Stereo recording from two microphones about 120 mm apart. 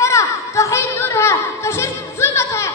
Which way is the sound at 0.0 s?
25° left (ahead or behind).